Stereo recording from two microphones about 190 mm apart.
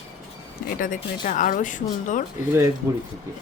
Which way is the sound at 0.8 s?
45° left (ahead or behind).